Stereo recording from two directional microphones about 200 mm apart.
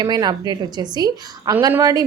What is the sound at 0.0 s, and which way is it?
A woman's voice, 20° right (ahead or behind).